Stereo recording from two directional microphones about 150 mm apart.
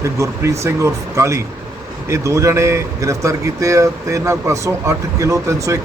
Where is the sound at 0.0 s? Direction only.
20° right (ahead or behind).